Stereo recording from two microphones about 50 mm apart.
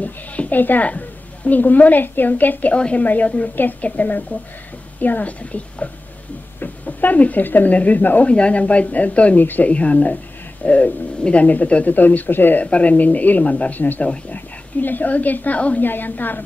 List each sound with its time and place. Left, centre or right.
0.0 s a sound: left
1.6 s speech: left
8.3 s speech: left
12.6 s a woman's voice: left
15.8 s speech: left